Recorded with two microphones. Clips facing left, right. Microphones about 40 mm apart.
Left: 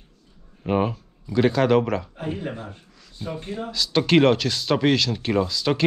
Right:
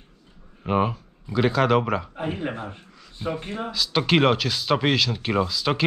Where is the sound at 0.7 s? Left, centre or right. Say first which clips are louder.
Even; centre.